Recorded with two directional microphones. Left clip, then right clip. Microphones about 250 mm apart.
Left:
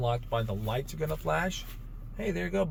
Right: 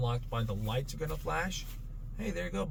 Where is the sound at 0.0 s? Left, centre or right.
Left.